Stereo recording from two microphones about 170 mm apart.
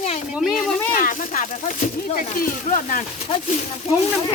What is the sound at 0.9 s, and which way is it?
Speech, 50° left (ahead or behind).